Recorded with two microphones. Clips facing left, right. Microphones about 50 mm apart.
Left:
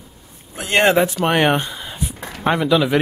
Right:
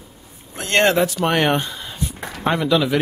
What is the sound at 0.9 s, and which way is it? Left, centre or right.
Speech, left.